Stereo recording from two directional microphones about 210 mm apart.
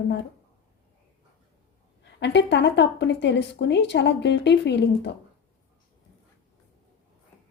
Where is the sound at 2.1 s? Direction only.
55° left (ahead or behind).